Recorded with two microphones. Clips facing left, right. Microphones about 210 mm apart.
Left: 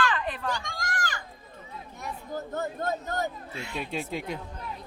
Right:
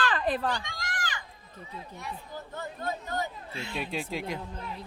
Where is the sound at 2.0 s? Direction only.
45° left (ahead or behind).